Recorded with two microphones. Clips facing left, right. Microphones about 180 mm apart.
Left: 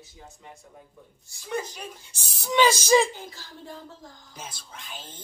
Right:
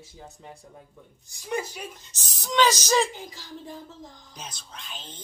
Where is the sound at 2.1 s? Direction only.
10° left (ahead or behind).